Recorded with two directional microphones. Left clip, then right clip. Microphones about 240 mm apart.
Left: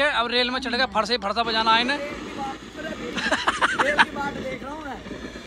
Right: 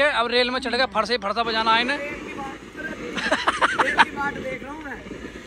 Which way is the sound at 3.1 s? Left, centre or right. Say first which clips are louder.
Right 1 dB; centre.